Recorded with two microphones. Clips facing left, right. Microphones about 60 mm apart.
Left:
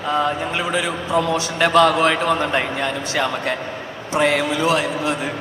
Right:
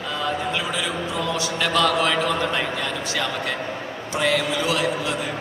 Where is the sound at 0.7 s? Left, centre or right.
Left.